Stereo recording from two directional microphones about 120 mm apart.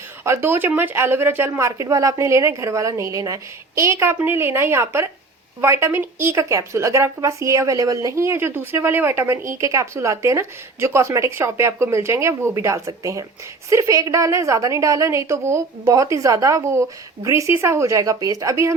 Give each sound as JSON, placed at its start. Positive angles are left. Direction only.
{"t": 0.3, "sound": "a woman's voice", "side_deg": -20}